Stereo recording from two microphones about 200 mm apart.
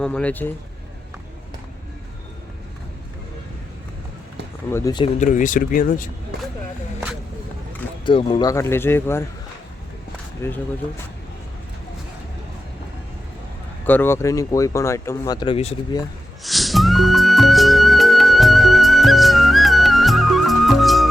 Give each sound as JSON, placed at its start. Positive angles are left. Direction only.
{"t": 0.0, "sound": "speech", "side_deg": 5}
{"t": 4.7, "sound": "speech", "side_deg": 15}
{"t": 5.2, "sound": "speech", "side_deg": 40}
{"t": 8.0, "sound": "speech", "side_deg": 25}
{"t": 10.4, "sound": "speech", "side_deg": 10}
{"t": 13.8, "sound": "speech", "side_deg": 10}
{"t": 16.4, "sound": "music", "side_deg": 0}